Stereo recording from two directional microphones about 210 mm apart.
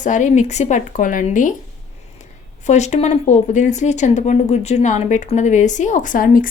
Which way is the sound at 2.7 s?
35° left (ahead or behind).